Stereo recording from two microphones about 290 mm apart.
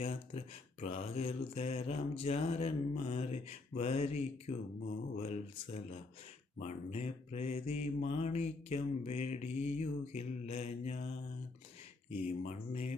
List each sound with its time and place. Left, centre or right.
0.0 s speech: left
12.2 s speech: left